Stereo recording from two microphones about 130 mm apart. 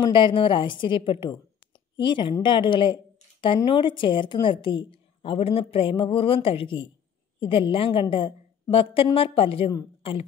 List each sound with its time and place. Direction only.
0.0 s a woman's voice: 40° left (ahead or behind)